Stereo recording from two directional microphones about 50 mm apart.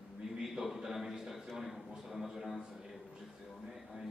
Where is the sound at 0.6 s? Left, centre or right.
Centre.